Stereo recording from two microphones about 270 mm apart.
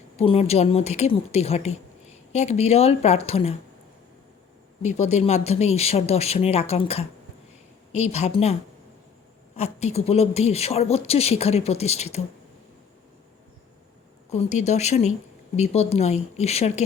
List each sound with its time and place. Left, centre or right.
0.2 s speech: left
4.8 s speech: left
9.6 s speech: left
14.3 s speech: left